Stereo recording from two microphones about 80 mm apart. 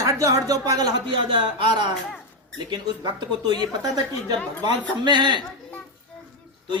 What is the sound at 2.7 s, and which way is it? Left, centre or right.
Speech, right.